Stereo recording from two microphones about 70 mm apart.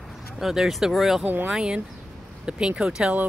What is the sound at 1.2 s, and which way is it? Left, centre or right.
Speech, right.